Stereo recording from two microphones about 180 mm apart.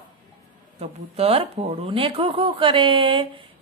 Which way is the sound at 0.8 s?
35° right (ahead or behind).